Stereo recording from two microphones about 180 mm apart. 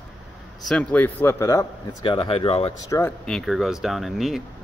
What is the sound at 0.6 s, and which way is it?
A man's voice, 5° left (ahead or behind).